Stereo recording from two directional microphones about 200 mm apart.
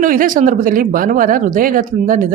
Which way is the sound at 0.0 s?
45° right (ahead or behind).